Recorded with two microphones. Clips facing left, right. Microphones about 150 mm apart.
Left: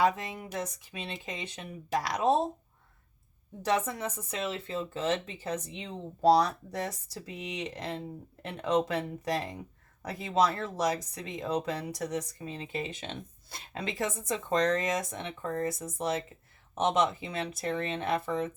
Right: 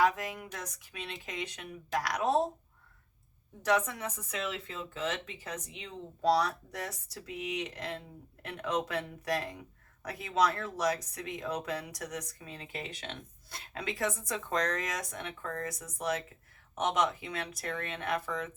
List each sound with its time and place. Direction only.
0.0 s speech: 25° left (ahead or behind)
3.7 s speech: 30° left (ahead or behind)